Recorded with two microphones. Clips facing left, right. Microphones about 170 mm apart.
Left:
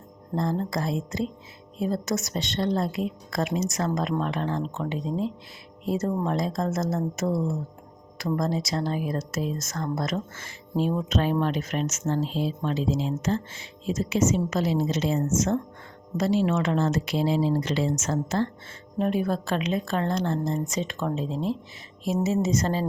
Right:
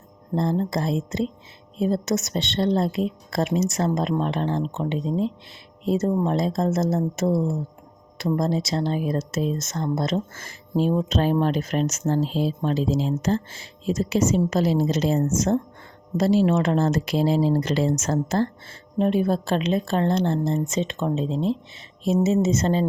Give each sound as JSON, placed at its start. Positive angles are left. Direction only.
{"t": 0.3, "sound": "a woman's voice", "side_deg": -25}
{"t": 10.3, "sound": "speech", "side_deg": -35}
{"t": 18.9, "sound": "a woman's voice", "side_deg": -25}